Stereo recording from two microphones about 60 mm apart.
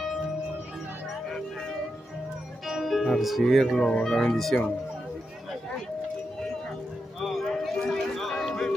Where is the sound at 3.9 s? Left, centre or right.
Centre.